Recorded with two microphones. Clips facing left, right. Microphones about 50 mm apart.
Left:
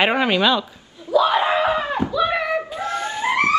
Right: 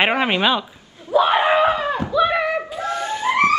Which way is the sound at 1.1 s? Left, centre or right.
Right.